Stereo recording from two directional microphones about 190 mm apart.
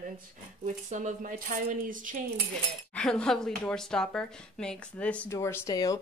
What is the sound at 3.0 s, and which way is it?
Speech, 5° left (ahead or behind).